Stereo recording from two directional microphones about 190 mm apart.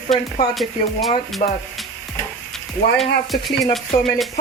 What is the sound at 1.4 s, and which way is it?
Speech, 45° left (ahead or behind).